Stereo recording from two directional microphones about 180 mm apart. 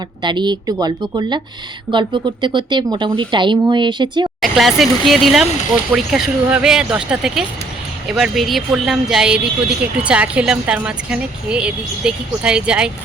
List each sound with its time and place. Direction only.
0.2 s speech: 25° right (ahead or behind)
4.4 s speech: centre (ahead or behind)